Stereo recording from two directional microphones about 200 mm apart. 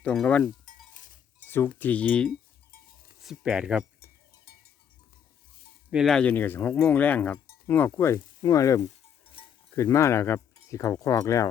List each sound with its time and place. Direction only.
0.0 s speech: 5° left (ahead or behind)
0.6 s cowbell: 40° left (ahead or behind)
1.4 s a sound: 10° left (ahead or behind)
1.8 s speech: 5° left (ahead or behind)
5.9 s speech: centre (ahead or behind); by 11.4 s 15° left (ahead or behind)